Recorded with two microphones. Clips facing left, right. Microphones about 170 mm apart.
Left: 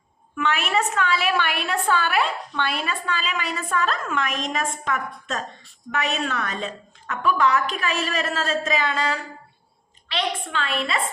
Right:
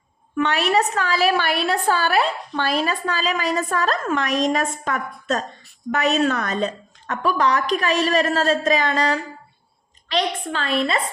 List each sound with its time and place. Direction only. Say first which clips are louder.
0.3 s a woman's voice: right 4 dB; 35° right (ahead or behind)